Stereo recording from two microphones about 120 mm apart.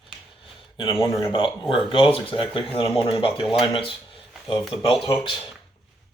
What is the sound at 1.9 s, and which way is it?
Speech, 50° left (ahead or behind).